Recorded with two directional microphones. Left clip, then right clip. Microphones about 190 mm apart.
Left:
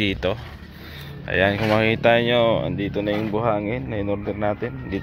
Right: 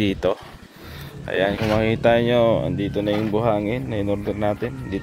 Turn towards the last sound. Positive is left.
turn(degrees=-20)  # may be behind; listen again after turning